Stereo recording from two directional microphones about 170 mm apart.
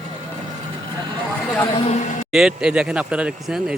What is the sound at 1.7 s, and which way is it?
Speech, 40° left (ahead or behind).